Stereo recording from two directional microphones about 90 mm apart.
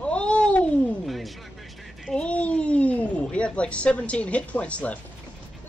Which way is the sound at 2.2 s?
15° left (ahead or behind).